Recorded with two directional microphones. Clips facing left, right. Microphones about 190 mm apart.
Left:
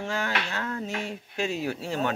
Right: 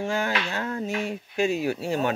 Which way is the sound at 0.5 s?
25° right (ahead or behind).